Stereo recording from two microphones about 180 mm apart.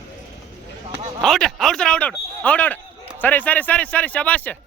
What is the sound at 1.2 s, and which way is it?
A man's voice, centre (ahead or behind).